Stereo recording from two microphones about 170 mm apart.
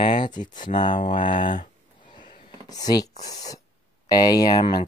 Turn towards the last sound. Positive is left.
turn(degrees=25)  # may be behind; listen again after turning